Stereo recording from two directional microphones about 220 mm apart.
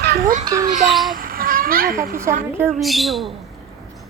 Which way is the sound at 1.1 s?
40° right (ahead or behind).